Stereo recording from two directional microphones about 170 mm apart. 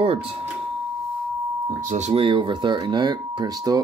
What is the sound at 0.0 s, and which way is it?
Speech, 35° right (ahead or behind).